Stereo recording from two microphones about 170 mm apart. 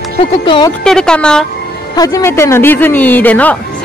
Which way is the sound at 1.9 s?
20° left (ahead or behind).